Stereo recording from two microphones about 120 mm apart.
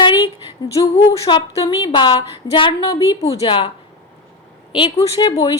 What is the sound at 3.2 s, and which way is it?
Speech, 55° left (ahead or behind).